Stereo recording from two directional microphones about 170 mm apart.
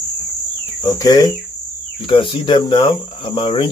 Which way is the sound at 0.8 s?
25° left (ahead or behind).